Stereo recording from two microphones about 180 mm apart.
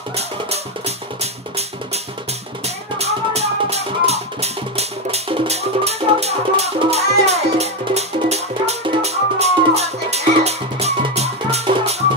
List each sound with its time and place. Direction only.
0.5 s music: 35° right (ahead or behind)
3.0 s music: 35° right (ahead or behind)